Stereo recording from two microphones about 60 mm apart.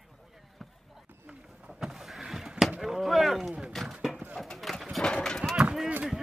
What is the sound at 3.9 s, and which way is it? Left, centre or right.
Horse, centre.